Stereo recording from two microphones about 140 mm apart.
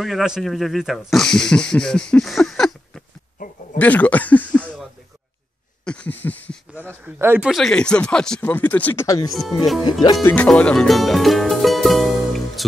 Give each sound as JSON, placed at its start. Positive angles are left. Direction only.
{"t": 0.0, "sound": "speech", "side_deg": 0}
{"t": 3.7, "sound": "a sound", "side_deg": 10}
{"t": 5.9, "sound": "a sound", "side_deg": 10}
{"t": 6.7, "sound": "speech", "side_deg": -15}
{"t": 7.4, "sound": "speech", "side_deg": 0}
{"t": 9.0, "sound": "speech", "side_deg": 25}
{"t": 9.3, "sound": "speech", "side_deg": 0}